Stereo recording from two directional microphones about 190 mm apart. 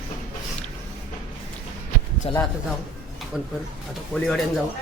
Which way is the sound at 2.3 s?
30° left (ahead or behind).